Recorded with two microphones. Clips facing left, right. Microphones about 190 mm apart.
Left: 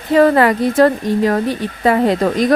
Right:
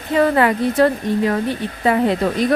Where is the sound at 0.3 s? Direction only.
40° left (ahead or behind).